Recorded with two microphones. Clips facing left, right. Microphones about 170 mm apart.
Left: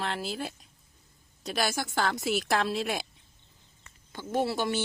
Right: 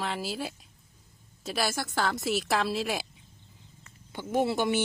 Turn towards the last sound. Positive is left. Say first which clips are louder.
# right 2 dB
turn(degrees=-20)  # may be behind; listen again after turning